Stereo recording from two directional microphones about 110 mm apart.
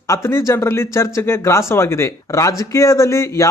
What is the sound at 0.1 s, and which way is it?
Speech, 25° left (ahead or behind).